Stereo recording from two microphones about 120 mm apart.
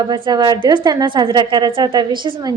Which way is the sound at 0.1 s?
35° right (ahead or behind).